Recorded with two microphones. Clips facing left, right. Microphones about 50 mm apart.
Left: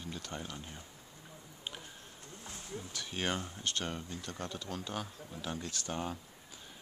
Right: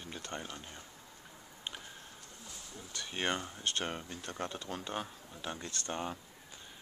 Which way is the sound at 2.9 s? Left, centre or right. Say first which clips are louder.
Right 1 dB; centre.